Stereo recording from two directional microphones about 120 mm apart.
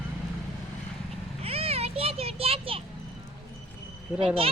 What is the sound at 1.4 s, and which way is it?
Children playing, 55° right (ahead or behind).